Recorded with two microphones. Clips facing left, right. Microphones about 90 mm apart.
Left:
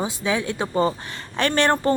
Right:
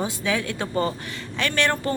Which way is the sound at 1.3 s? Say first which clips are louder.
Left 4 dB; 35° left (ahead or behind).